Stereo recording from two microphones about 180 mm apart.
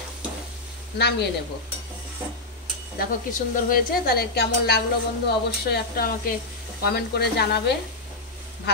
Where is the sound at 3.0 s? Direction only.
50° left (ahead or behind).